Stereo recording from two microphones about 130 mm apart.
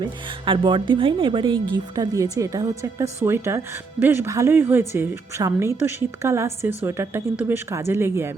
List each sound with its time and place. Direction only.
0.0 s speech: 40° right (ahead or behind)
1.7 s a woman's voice: 30° right (ahead or behind)
6.6 s speech: 65° left (ahead or behind)
6.8 s a woman's voice: 20° right (ahead or behind)